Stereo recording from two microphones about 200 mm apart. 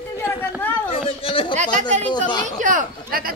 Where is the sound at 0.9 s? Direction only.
30° left (ahead or behind).